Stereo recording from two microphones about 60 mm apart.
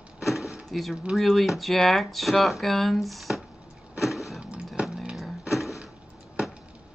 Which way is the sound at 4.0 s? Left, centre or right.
Centre.